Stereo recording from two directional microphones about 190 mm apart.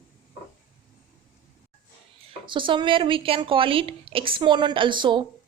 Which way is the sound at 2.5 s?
25° right (ahead or behind).